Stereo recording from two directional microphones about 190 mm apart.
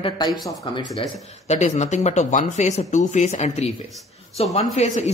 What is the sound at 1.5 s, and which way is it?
Speech, 35° left (ahead or behind).